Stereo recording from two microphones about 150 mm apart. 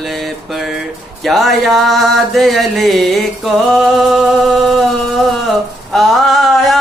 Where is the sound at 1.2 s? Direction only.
Centre (ahead or behind).